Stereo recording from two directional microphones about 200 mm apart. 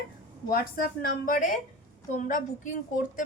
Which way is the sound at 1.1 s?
40° left (ahead or behind).